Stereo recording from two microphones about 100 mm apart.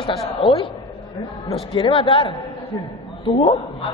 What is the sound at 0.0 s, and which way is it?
Speech, 60° left (ahead or behind).